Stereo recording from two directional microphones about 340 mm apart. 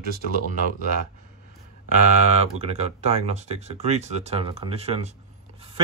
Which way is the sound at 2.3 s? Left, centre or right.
Centre.